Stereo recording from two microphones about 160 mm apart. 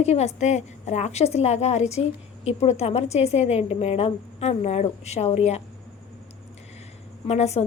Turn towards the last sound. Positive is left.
turn(degrees=40)  # may be behind; listen again after turning